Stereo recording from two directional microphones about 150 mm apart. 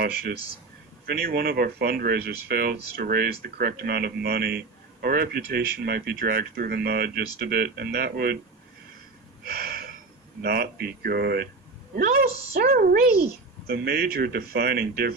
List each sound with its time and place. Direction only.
0.0 s speech: 90° right
9.5 s a sound: 90° right
10.4 s a woman's voice: 90° right